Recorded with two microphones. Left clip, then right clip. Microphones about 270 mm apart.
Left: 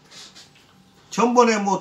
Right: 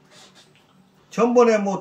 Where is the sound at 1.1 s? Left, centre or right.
Centre.